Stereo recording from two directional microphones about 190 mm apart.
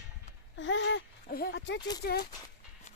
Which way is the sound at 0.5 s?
75° left (ahead or behind).